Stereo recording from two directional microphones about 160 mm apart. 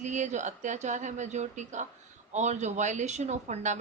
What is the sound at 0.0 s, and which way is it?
Speech, 50° right (ahead or behind).